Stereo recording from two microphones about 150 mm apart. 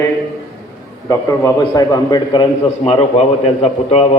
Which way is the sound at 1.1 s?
20° left (ahead or behind).